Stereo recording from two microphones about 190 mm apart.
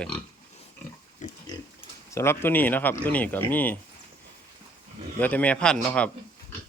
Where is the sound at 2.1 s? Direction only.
15° left (ahead or behind).